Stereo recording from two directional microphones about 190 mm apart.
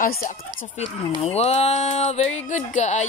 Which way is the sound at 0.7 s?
35° left (ahead or behind).